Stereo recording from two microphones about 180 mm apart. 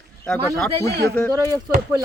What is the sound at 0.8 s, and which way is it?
Speech, 65° right (ahead or behind).